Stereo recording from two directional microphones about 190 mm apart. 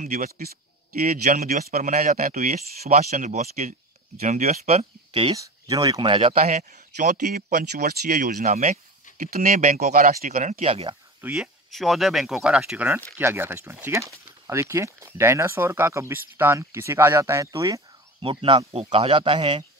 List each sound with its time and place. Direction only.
0.0 s speech: 45° right (ahead or behind)
11.1 s speech: 5° right (ahead or behind)
18.2 s speech: 30° right (ahead or behind)